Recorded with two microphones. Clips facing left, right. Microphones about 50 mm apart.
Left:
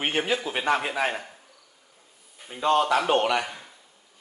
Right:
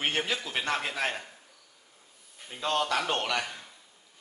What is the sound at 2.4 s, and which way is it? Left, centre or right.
A man's voice, centre.